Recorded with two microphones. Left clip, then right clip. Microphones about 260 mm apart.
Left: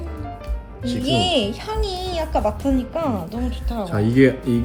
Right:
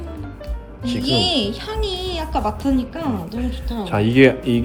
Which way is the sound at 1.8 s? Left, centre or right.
Left.